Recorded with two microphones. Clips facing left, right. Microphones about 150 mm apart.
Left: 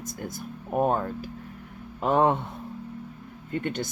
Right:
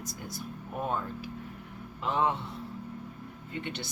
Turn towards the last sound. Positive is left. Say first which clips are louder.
# left 8 dB
turn(degrees=50)  # may be behind; listen again after turning